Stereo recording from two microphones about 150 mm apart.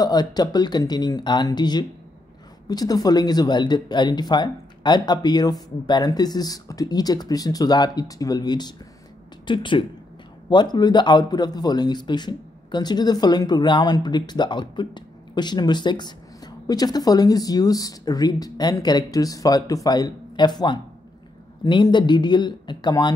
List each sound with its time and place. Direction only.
0.0 s a man's voice: 25° left (ahead or behind)